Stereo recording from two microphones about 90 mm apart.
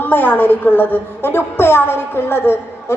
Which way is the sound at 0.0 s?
20° left (ahead or behind).